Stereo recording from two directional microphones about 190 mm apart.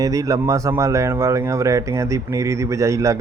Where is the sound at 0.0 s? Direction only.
20° right (ahead or behind).